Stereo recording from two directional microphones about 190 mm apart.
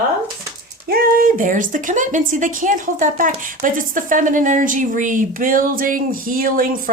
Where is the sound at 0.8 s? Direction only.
50° right (ahead or behind).